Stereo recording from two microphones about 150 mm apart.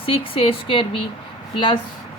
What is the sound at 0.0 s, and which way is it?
A woman's voice, 40° left (ahead or behind).